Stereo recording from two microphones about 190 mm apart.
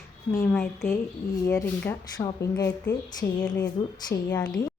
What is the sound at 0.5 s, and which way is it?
A woman's voice, 10° left (ahead or behind).